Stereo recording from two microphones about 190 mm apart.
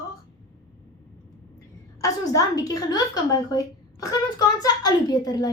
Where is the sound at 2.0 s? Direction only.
20° left (ahead or behind).